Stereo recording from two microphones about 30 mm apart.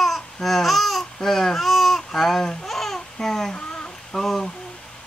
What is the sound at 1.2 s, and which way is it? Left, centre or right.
Speech, centre.